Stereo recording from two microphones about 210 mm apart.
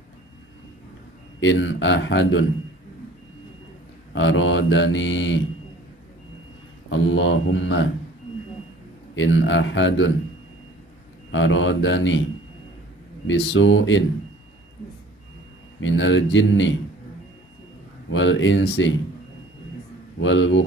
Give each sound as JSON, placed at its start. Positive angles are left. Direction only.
{"t": 1.4, "sound": "mantra", "side_deg": 65}
{"t": 4.1, "sound": "mantra", "side_deg": 60}
{"t": 6.9, "sound": "mantra", "side_deg": 60}
{"t": 9.1, "sound": "mantra", "side_deg": 65}
{"t": 11.3, "sound": "mantra", "side_deg": 65}
{"t": 13.3, "sound": "mantra", "side_deg": 60}
{"t": 15.8, "sound": "mantra", "side_deg": 60}
{"t": 18.1, "sound": "mantra", "side_deg": 60}
{"t": 20.2, "sound": "mantra", "side_deg": 60}